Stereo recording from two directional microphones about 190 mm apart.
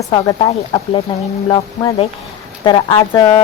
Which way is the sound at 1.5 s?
30° left (ahead or behind).